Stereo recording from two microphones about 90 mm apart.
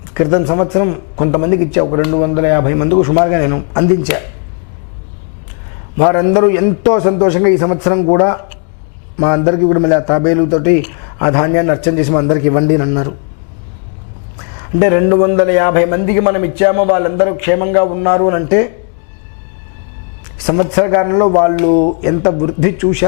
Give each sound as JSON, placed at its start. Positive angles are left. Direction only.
{"t": 0.1, "sound": "a man's voice", "side_deg": 15}
{"t": 6.0, "sound": "a man's voice", "side_deg": 20}
{"t": 14.8, "sound": "a man's voice", "side_deg": 15}
{"t": 20.4, "sound": "a man's voice", "side_deg": 15}